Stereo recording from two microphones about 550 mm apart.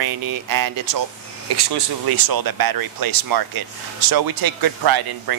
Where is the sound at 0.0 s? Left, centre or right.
Right.